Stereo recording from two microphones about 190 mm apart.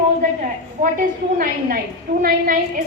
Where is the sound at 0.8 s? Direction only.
45° right (ahead or behind).